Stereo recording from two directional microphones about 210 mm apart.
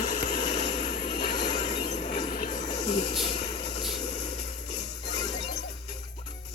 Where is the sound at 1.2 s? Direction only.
20° left (ahead or behind).